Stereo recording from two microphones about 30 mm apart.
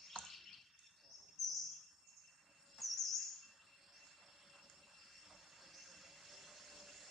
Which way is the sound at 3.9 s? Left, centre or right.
Centre.